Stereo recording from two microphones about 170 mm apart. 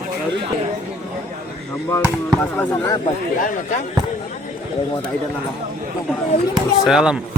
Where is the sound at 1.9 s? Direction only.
20° left (ahead or behind).